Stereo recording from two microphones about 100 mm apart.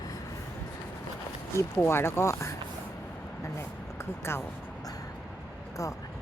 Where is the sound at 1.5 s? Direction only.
25° left (ahead or behind).